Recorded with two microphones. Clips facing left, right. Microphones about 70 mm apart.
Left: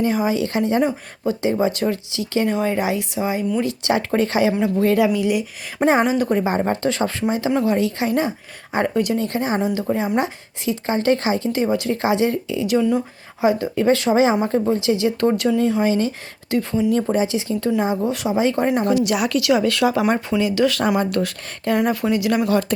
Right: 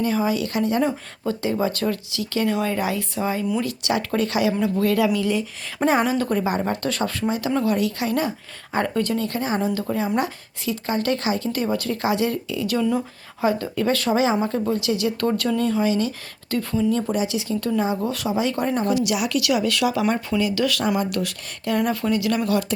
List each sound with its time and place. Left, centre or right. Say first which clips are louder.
0.0 s a woman's voice: left 2 dB; left
0.9 s a woman's voice: left 2 dB; centre
3.6 s a woman's voice: left 4 dB; left
16.9 s a woman's voice: left 4 dB; left
18.9 s speech: left 3 dB; left
19.4 s a woman's voice: left 4 dB; left
21.8 s a woman's voice: left 2 dB; centre